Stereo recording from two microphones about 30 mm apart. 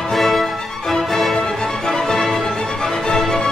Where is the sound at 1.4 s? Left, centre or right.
Left.